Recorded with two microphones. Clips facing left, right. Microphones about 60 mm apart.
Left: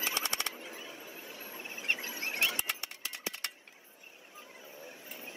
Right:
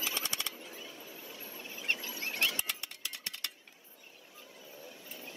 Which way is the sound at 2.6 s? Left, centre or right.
Centre.